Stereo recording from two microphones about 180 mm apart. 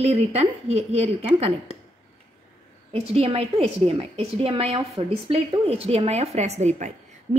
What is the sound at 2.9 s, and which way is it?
A woman's voice, 35° right (ahead or behind).